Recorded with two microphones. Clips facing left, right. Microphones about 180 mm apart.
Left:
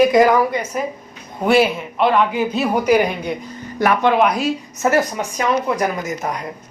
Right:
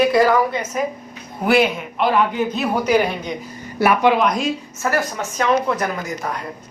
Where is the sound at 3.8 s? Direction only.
10° right (ahead or behind).